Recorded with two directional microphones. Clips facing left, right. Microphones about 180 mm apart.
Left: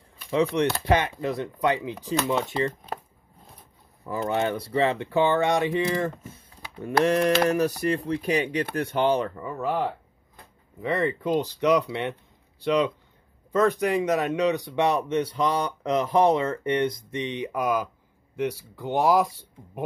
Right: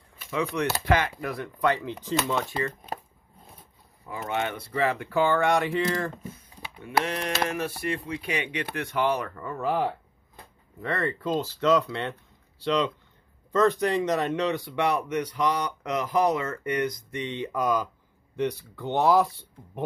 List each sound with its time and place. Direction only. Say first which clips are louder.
0.3 s speech: left 5 dB; 30° left (ahead or behind)
4.2 s speech: left 4 dB; 35° left (ahead or behind)
7.1 s mantra: left 10 dB; 45° left (ahead or behind)
7.4 s speech: left 7 dB; 40° left (ahead or behind)
9.4 s speech: even; 5° left (ahead or behind)